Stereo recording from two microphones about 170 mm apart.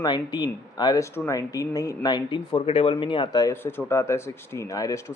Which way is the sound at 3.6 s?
15° left (ahead or behind).